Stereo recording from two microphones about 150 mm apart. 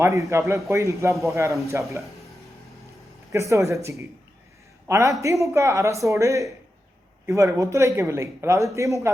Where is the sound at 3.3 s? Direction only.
20° right (ahead or behind).